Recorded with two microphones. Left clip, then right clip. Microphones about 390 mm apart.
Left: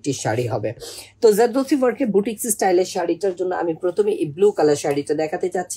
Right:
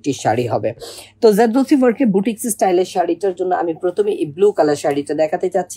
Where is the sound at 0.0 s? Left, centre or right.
Centre.